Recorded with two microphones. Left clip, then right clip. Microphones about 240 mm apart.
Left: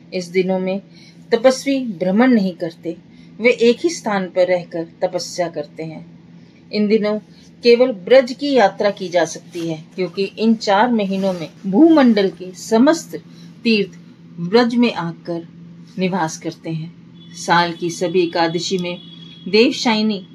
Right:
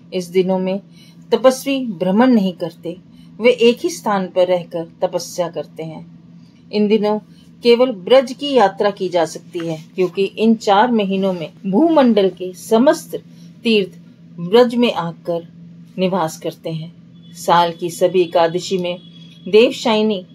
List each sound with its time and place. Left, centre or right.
0.1 s a woman's voice: right